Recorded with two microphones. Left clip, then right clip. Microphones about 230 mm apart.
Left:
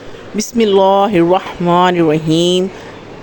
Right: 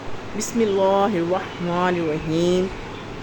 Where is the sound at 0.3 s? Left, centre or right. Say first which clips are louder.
Left 9 dB; left.